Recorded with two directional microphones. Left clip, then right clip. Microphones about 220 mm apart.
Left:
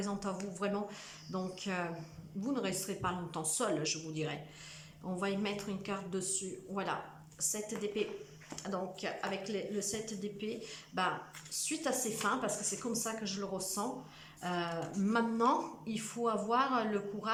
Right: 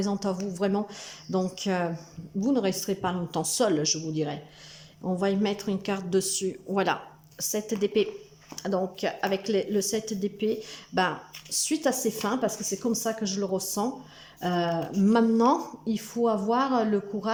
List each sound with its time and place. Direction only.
0.0 s a woman's voice: 25° right (ahead or behind)